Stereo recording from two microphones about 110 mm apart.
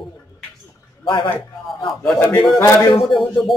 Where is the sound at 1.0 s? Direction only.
50° left (ahead or behind).